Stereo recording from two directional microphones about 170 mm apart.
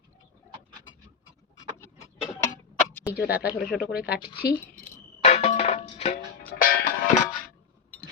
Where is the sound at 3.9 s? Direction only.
65° left (ahead or behind).